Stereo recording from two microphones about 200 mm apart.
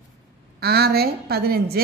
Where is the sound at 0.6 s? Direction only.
50° right (ahead or behind).